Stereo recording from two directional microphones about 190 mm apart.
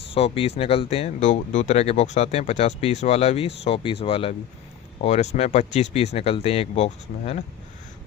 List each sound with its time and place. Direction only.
0.1 s speech: 30° left (ahead or behind)